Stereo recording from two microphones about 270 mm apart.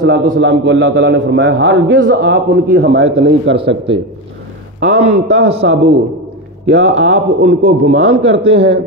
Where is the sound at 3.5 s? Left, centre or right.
Centre.